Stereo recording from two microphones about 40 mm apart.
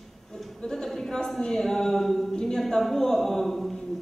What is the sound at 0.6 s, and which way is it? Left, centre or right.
A man's voice, centre.